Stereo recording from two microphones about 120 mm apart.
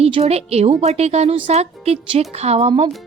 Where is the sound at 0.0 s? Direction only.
60° right (ahead or behind).